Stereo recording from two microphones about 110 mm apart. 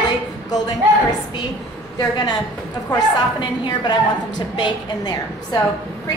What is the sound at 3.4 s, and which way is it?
A woman's voice, 40° left (ahead or behind).